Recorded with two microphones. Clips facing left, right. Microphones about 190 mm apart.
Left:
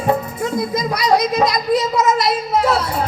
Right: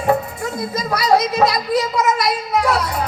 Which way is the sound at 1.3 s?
20° left (ahead or behind).